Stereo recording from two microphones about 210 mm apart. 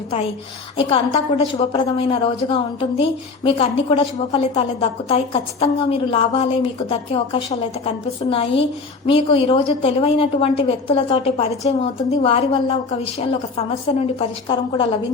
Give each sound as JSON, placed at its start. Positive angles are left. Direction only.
{"t": 0.8, "sound": "a woman's voice", "side_deg": 25}